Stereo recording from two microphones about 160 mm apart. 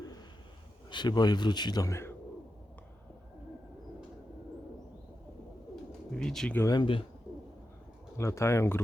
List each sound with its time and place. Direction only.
0.9 s speech: 25° left (ahead or behind)
6.1 s speech: 5° left (ahead or behind)
6.6 s speech: 25° left (ahead or behind)
8.2 s speech: 15° left (ahead or behind)